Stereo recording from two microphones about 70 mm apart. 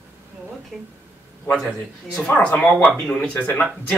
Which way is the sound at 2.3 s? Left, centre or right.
Left.